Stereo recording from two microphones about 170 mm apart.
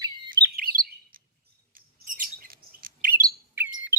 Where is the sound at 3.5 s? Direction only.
10° right (ahead or behind).